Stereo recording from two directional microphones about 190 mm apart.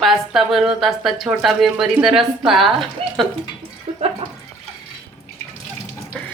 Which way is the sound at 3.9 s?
35° right (ahead or behind).